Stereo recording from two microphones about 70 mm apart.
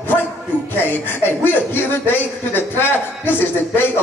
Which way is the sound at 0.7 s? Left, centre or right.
Left.